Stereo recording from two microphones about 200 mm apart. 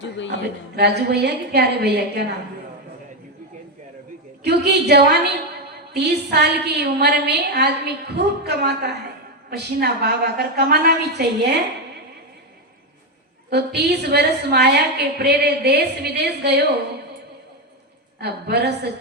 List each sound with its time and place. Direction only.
0.8 s a woman's voice: 55° right (ahead or behind)
4.4 s a woman's voice: 55° right (ahead or behind)
13.5 s a woman's voice: 55° right (ahead or behind)
18.2 s a woman's voice: 55° right (ahead or behind)